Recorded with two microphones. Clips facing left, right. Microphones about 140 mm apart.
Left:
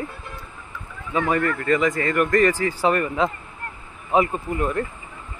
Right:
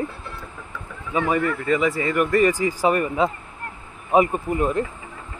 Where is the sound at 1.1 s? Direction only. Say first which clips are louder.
Even; 5° right (ahead or behind).